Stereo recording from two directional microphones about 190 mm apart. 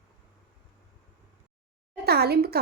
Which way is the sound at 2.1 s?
55° right (ahead or behind).